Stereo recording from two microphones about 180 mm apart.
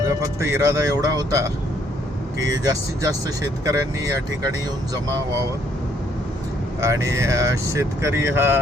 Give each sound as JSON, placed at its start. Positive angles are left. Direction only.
{"t": 0.0, "sound": "speech", "side_deg": -15}
{"t": 3.7, "sound": "speech", "side_deg": -20}
{"t": 6.8, "sound": "speech", "side_deg": -15}